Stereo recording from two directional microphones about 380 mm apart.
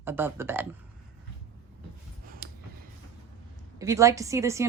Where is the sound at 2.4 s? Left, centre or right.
Right.